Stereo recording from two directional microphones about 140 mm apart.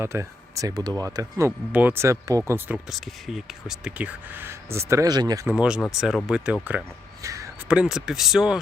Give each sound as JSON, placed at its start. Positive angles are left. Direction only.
{"t": 0.0, "sound": "speech", "side_deg": -20}
{"t": 2.7, "sound": "speech", "side_deg": 0}
{"t": 5.5, "sound": "speech", "side_deg": -5}
{"t": 7.2, "sound": "a sound", "side_deg": -20}
{"t": 7.7, "sound": "speech", "side_deg": -5}